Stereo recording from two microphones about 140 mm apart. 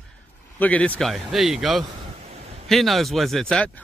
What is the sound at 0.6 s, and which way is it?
Speech, 10° left (ahead or behind).